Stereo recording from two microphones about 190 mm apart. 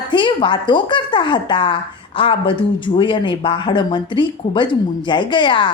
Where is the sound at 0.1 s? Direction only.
25° left (ahead or behind).